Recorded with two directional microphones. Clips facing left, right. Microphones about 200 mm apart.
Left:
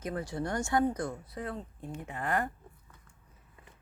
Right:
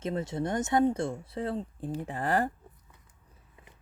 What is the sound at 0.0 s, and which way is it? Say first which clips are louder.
Speech: right 3 dB; 25° right (ahead or behind).